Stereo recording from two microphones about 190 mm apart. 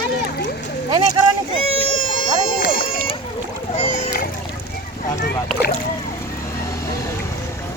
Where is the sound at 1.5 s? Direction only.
30° left (ahead or behind).